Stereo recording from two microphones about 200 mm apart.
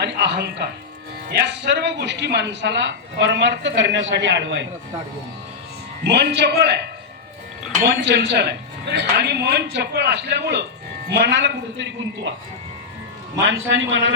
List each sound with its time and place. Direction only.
0.0 s speech: 60° right (ahead or behind)
6.1 s speech: 55° right (ahead or behind)
13.4 s a man's voice: 65° right (ahead or behind)